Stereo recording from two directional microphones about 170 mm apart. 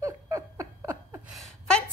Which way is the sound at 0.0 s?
15° right (ahead or behind).